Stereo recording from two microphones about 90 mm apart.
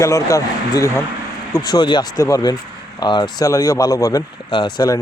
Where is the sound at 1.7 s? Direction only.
55° left (ahead or behind).